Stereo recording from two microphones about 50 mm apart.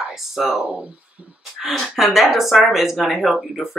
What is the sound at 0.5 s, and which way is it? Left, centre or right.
Speech, right.